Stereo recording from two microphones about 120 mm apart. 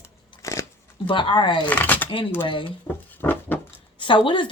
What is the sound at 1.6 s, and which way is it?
Speech, 15° left (ahead or behind).